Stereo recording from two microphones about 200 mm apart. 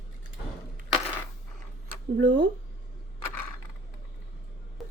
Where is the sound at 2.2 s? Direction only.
65° right (ahead or behind).